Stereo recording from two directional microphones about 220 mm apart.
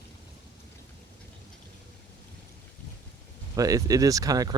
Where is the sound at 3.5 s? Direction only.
15° right (ahead or behind).